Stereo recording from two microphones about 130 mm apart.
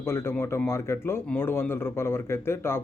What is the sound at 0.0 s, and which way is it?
Speech, 20° left (ahead or behind).